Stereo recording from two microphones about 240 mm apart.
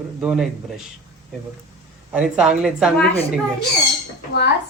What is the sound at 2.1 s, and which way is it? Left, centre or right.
A man's voice, centre.